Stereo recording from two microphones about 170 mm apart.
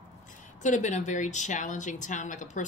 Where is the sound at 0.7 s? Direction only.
45° left (ahead or behind).